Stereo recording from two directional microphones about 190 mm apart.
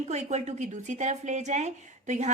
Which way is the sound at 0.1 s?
35° right (ahead or behind).